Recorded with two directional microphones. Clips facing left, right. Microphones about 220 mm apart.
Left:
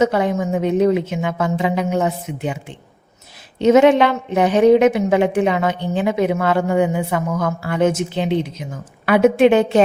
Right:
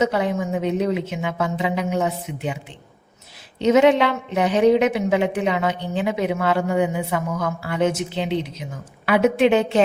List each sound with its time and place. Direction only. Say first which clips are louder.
0.0 s a woman's voice: left 4 dB; 50° left (ahead or behind)
3.6 s a woman's voice: left 4 dB; 50° left (ahead or behind)